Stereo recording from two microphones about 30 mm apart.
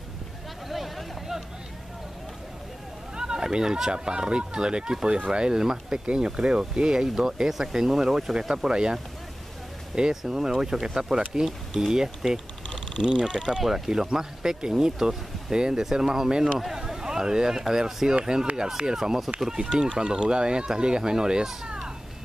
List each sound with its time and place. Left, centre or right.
0.7 s a sound: centre
3.2 s a sound: right
3.5 s speech: centre
5.6 s speech: centre
6.0 s speech: right
9.9 s speech: right
12.6 s a sound: left
13.6 s speech: centre
14.1 s speech: centre
16.5 s speech: centre
18.9 s speech: centre
19.5 s speech: right
21.6 s cat: right